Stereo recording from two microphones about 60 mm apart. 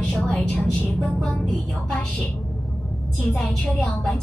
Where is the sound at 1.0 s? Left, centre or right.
Centre.